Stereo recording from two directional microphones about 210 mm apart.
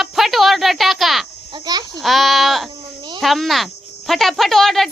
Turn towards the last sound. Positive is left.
turn(degrees=0)  # may be behind; listen again after turning